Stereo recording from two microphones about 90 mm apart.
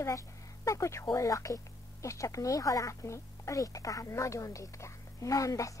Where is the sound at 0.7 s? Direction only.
35° left (ahead or behind).